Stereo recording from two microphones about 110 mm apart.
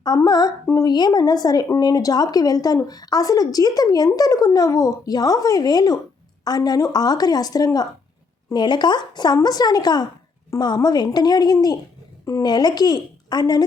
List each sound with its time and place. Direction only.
0.0 s speech: 40° left (ahead or behind)